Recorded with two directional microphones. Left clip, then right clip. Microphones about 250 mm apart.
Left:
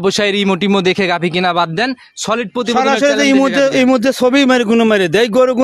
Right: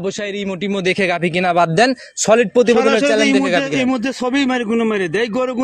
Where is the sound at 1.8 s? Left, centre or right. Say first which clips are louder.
Right 3 dB; centre.